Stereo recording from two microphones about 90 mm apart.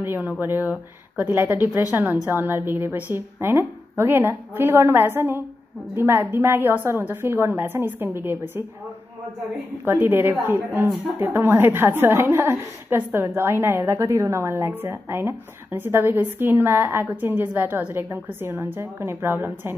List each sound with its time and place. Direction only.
0.0 s a woman's voice: 25° right (ahead or behind)
9.8 s a woman's voice: 25° right (ahead or behind)